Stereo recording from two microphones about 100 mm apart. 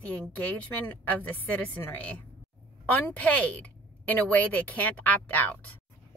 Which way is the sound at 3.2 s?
15° left (ahead or behind).